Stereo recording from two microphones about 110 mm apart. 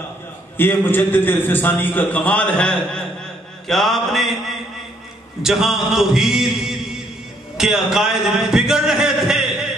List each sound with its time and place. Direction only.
0.6 s a man's voice: 20° left (ahead or behind); by 9.8 s 5° right (ahead or behind)